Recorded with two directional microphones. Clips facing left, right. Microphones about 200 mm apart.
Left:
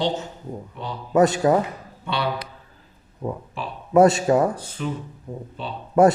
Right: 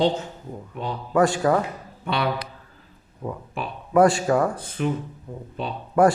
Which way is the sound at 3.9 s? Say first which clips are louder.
Left 2 dB; 25° left (ahead or behind).